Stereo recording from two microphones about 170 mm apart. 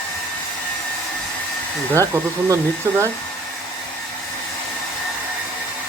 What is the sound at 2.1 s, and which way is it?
Speech, 15° right (ahead or behind).